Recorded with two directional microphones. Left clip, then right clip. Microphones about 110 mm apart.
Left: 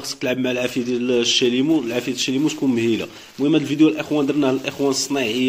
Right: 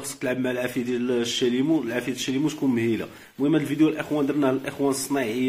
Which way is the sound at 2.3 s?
30° left (ahead or behind).